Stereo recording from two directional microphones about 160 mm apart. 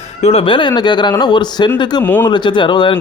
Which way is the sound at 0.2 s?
40° left (ahead or behind).